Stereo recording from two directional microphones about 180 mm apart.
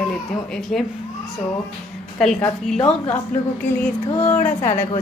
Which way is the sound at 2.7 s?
35° left (ahead or behind).